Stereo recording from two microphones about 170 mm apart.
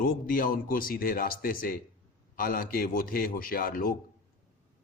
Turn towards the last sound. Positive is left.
turn(degrees=60)  # may be behind; listen again after turning